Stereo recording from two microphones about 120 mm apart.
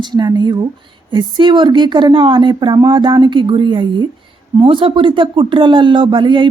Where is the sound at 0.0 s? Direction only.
35° right (ahead or behind).